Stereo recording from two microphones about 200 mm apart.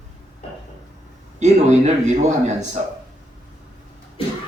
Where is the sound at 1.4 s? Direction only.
35° right (ahead or behind).